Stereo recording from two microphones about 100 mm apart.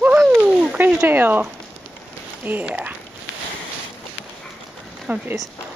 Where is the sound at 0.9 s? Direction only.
20° right (ahead or behind).